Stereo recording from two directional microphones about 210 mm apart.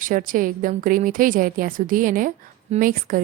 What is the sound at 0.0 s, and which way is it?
A woman's voice, 40° right (ahead or behind).